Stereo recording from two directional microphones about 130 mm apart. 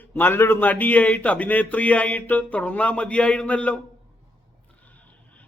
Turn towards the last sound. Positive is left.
turn(degrees=10)  # may be behind; listen again after turning